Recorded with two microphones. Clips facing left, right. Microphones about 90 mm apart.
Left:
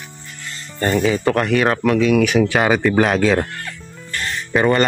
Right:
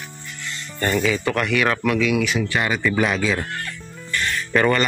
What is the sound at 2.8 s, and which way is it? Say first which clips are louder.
Speech: left 5 dB; 50° left (ahead or behind).